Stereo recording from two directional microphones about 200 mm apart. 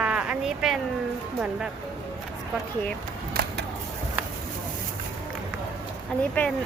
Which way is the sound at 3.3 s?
50° right (ahead or behind).